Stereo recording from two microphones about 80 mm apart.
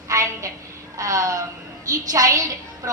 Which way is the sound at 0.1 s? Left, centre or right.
Right.